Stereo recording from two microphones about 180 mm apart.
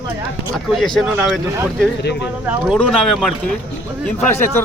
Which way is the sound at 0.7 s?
Centre (ahead or behind).